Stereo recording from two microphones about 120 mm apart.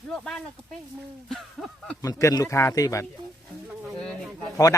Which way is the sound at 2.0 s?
25° left (ahead or behind).